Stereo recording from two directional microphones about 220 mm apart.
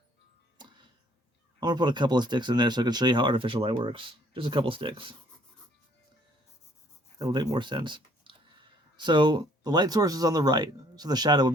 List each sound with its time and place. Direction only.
1.5 s speech: 20° right (ahead or behind)
7.2 s speech: 15° right (ahead or behind)